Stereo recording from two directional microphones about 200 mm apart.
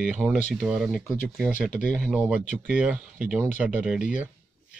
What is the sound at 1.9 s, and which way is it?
Speech, 5° right (ahead or behind).